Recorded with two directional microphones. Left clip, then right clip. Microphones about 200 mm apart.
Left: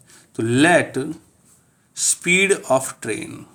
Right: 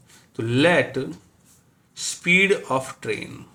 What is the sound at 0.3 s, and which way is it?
Speech, 55° left (ahead or behind).